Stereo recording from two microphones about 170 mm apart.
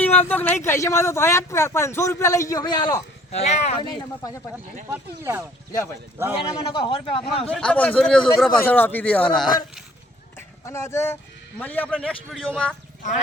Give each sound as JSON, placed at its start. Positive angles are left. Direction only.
{"t": 0.0, "sound": "a man's voice", "side_deg": 10}
{"t": 3.3, "sound": "speech", "side_deg": 40}
{"t": 3.8, "sound": "speech", "side_deg": 25}
{"t": 4.9, "sound": "speech", "side_deg": -15}
{"t": 6.7, "sound": "speech", "side_deg": 30}
{"t": 7.5, "sound": "a man's voice", "side_deg": 5}
{"t": 10.3, "sound": "a man's voice", "side_deg": 15}